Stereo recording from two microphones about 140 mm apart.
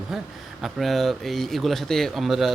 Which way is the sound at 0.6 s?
Centre (ahead or behind).